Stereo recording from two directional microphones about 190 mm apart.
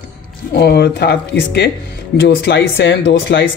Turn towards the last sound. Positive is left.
turn(degrees=70)  # may be behind; listen again after turning